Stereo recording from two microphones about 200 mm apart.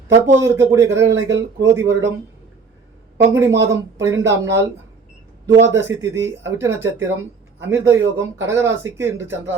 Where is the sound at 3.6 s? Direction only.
15° right (ahead or behind).